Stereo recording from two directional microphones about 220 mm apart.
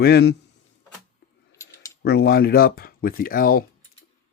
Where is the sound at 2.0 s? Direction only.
45° left (ahead or behind).